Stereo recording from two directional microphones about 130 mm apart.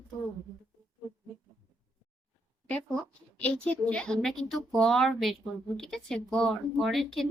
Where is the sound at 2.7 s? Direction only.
10° left (ahead or behind).